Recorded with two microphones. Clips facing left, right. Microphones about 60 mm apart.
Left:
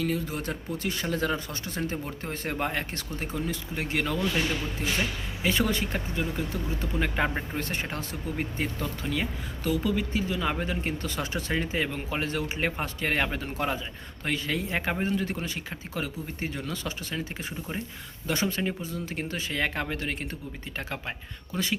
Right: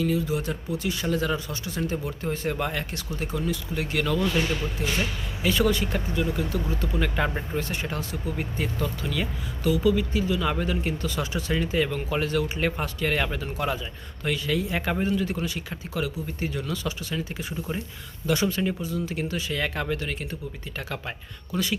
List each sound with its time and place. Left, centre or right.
0.0 s speech: left
5.4 s speech: left
11.8 s speech: left
21.5 s speech: left